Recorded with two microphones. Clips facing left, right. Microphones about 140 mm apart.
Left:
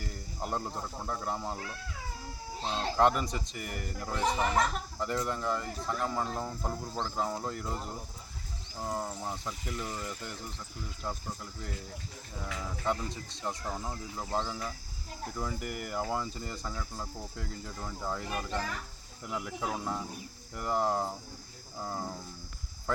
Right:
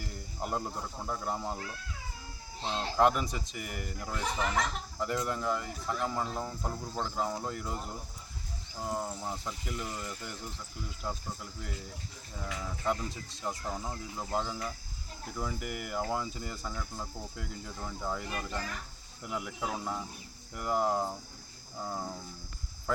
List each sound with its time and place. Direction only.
0.3 s speech: 5° right (ahead or behind)
2.7 s speech: 5° right (ahead or behind)
4.2 s speech: 45° left (ahead or behind)
4.9 s speech: centre (ahead or behind)
8.8 s speech: 5° right (ahead or behind)
12.8 s speech: centre (ahead or behind)